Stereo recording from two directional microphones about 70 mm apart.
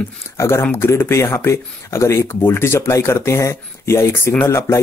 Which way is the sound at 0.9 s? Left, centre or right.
Left.